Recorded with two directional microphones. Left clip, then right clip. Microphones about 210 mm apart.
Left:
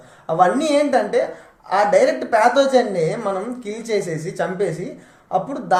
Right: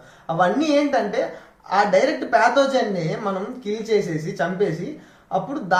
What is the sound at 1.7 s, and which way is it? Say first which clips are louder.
A woman's voice: left 3 dB; 40° left (ahead or behind).